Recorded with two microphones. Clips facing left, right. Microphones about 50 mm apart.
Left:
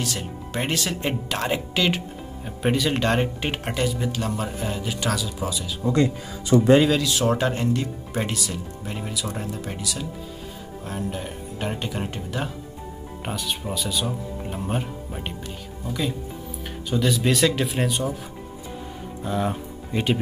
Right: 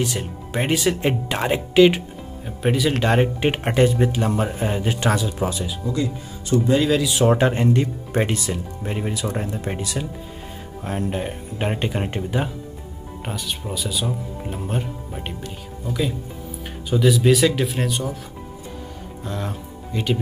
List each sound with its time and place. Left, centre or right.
0.0 s speech: centre
3.7 s speech: right
6.9 s speech: centre
7.2 s speech: right
13.2 s speech: centre
19.2 s speech: centre